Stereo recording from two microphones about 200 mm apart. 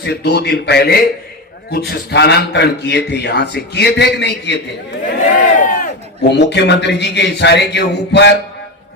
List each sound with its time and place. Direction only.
0.0 s a man's voice: 55° left (ahead or behind)
5.4 s crowd: 40° left (ahead or behind)
6.3 s a man's voice: 60° left (ahead or behind)